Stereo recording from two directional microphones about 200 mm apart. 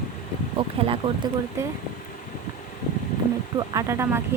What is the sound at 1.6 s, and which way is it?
Speech, 15° right (ahead or behind).